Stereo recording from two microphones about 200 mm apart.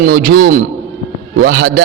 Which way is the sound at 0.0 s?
45° right (ahead or behind).